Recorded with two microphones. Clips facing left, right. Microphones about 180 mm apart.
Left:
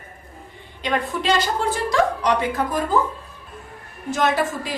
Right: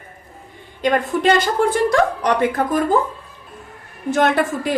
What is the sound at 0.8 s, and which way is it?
A woman's voice, 45° right (ahead or behind).